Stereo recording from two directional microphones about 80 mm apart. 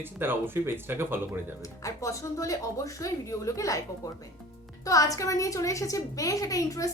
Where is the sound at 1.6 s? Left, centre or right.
Left.